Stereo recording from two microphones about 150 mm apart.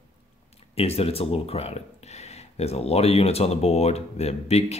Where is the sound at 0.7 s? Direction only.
40° left (ahead or behind).